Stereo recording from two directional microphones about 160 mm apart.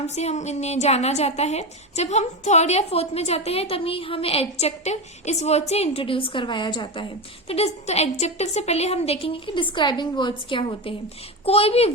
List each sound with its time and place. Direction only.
0.1 s a woman's voice: 45° left (ahead or behind)